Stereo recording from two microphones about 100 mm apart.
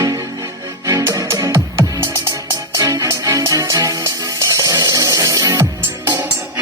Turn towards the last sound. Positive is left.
turn(degrees=-20)  # may be behind; listen again after turning